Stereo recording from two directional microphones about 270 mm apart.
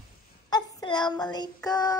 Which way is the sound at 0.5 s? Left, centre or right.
Centre.